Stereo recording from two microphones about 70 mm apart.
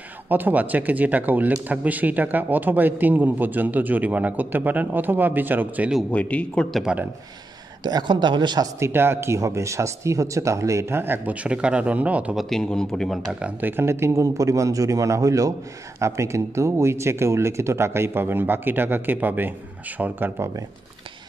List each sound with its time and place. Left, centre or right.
0.3 s a man's voice: right
6.1 s a man's voice: centre
7.8 s a woman's voice: right
8.7 s speech: right
11.3 s a man's voice: centre
12.4 s a man's voice: centre
13.6 s a man's voice: right